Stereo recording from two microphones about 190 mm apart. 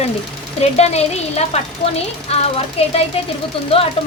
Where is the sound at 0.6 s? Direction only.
35° left (ahead or behind).